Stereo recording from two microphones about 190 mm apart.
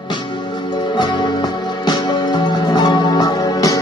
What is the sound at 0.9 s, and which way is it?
Music, 20° left (ahead or behind).